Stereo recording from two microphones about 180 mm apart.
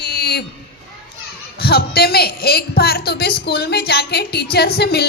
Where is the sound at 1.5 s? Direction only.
60° left (ahead or behind).